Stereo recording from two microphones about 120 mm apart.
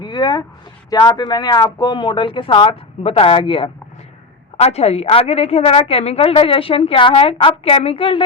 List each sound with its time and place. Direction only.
0.0 s a woman's voice: 35° left (ahead or behind)
4.5 s a woman's voice: 60° left (ahead or behind)